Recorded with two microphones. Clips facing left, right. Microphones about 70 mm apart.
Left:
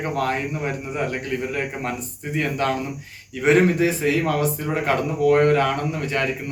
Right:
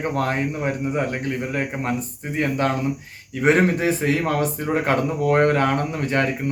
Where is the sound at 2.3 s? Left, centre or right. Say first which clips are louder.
Right 1 dB; right.